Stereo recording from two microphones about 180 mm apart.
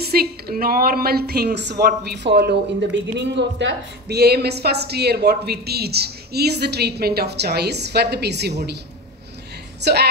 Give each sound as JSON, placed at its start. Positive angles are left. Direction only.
{"t": 0.0, "sound": "a woman's voice", "side_deg": -60}
{"t": 9.8, "sound": "a woman's voice", "side_deg": -65}